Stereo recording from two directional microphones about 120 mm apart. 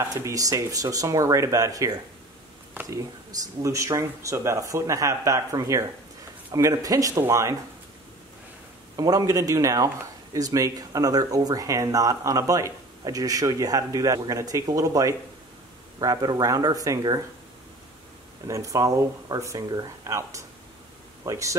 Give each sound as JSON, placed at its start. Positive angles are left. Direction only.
{"t": 0.0, "sound": "speech", "side_deg": -25}
{"t": 8.9, "sound": "speech", "side_deg": -35}
{"t": 18.5, "sound": "speech", "side_deg": -25}